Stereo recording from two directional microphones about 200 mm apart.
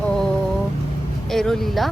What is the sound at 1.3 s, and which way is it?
Speech, centre (ahead or behind).